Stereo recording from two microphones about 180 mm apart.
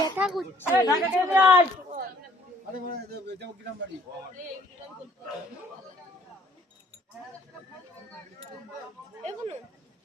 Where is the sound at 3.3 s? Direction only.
70° right (ahead or behind).